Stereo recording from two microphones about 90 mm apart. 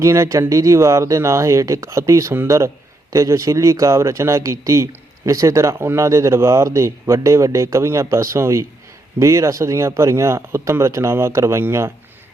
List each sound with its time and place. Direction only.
0.0 s speech: 35° right (ahead or behind)